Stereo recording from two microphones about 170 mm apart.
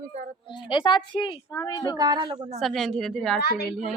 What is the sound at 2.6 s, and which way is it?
Speech, centre (ahead or behind).